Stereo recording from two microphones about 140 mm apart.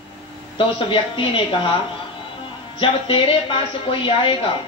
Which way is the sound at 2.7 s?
40° left (ahead or behind).